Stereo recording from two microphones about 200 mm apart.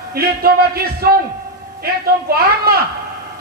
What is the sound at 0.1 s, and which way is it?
A man's voice, 50° right (ahead or behind).